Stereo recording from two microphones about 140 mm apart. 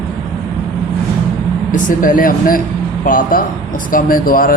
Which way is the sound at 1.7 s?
70° left (ahead or behind).